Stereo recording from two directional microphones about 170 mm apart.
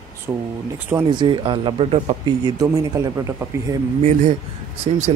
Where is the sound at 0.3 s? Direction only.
20° right (ahead or behind).